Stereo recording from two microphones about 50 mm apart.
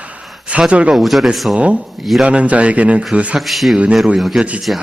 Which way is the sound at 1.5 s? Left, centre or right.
Right.